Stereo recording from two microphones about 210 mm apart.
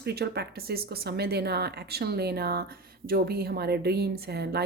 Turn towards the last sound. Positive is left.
turn(degrees=-50)  # may be behind; listen again after turning